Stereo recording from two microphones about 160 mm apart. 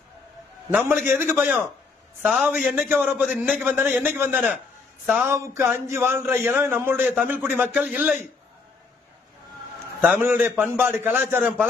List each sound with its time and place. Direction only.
0.7 s a man's voice: 10° right (ahead or behind)
10.0 s a man's voice: 10° right (ahead or behind)